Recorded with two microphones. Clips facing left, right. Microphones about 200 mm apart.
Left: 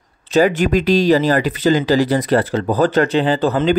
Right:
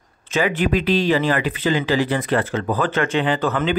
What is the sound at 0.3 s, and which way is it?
Speech, 40° left (ahead or behind).